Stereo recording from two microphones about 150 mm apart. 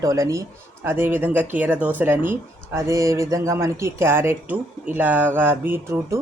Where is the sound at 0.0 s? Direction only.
20° right (ahead or behind).